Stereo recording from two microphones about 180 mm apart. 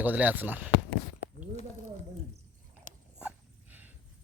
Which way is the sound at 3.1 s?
10° right (ahead or behind).